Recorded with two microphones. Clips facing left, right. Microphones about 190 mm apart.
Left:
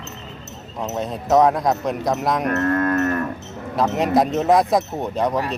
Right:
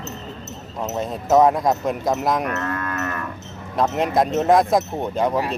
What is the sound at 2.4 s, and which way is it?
Livestock, 45° left (ahead or behind).